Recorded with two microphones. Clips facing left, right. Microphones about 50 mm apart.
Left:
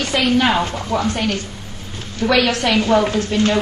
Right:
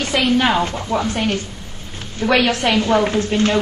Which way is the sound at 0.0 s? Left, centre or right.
Right.